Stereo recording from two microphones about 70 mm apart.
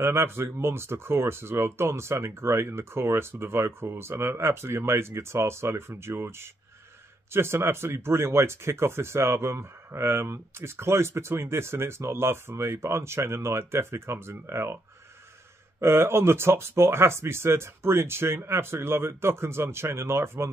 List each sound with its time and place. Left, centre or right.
0.0 s speech: right
15.8 s speech: right